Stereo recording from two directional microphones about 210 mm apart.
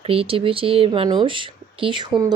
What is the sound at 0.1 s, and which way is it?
Speech, 25° right (ahead or behind).